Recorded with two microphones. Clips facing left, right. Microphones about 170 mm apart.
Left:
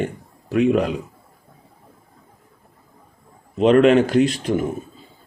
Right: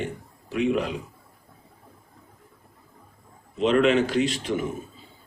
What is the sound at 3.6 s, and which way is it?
Speech, 55° left (ahead or behind).